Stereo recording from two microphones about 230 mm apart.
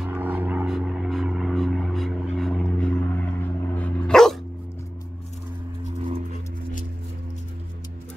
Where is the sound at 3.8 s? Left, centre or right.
Centre.